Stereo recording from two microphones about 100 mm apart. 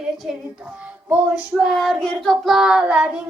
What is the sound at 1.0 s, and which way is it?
Female singing, 15° right (ahead or behind).